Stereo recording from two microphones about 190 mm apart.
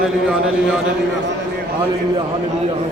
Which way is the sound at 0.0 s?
5° right (ahead or behind).